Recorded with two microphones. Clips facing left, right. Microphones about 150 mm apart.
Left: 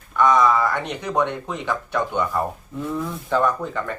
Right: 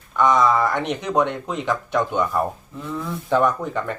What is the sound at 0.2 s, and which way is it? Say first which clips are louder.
Speech: even; 20° right (ahead or behind).